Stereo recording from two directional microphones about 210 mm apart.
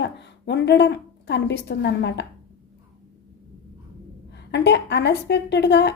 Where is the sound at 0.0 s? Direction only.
55° left (ahead or behind).